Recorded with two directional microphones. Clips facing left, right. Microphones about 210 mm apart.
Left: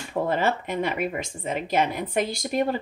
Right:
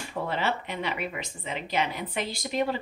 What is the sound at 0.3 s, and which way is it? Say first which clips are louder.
A woman's voice: left 4 dB; 45° left (ahead or behind).